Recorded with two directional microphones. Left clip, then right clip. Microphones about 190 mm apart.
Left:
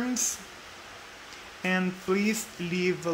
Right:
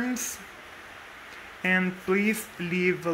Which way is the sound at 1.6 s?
5° right (ahead or behind).